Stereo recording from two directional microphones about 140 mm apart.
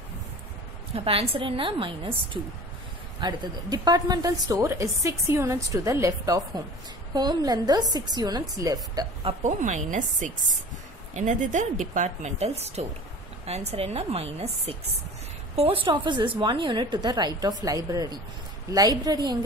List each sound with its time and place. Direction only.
0.9 s a woman's voice: 45° right (ahead or behind); by 9.0 s 25° right (ahead or behind)
9.4 s a woman's voice: 60° right (ahead or behind); by 19.3 s 30° right (ahead or behind)